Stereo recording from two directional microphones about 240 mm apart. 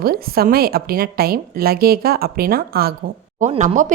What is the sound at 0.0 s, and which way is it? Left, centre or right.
A woman's voice, right.